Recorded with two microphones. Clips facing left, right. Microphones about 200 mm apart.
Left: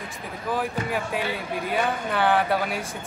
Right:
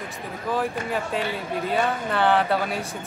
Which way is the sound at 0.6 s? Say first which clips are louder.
Right 1 dB; centre (ahead or behind).